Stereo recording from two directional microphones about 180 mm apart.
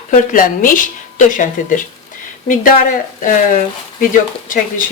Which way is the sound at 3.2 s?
45° left (ahead or behind).